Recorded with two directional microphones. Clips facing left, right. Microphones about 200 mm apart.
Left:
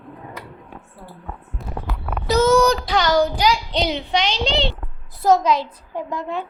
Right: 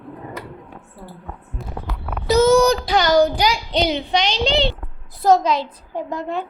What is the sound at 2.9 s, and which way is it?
A child's voice, 10° right (ahead or behind).